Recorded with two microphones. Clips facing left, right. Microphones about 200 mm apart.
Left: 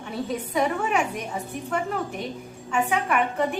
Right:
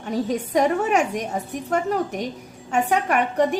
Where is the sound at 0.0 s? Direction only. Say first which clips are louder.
Right 5 dB; 40° right (ahead or behind).